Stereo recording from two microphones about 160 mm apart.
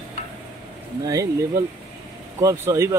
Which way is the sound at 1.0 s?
20° right (ahead or behind).